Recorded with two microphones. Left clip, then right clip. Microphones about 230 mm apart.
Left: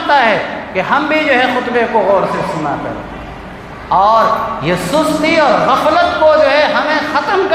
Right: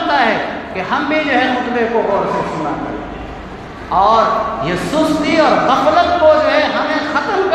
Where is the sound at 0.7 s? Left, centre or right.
Left.